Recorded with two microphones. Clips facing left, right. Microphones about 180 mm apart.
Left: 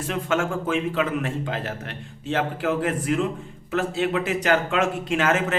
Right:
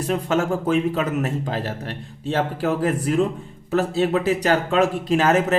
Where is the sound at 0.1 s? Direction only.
35° right (ahead or behind).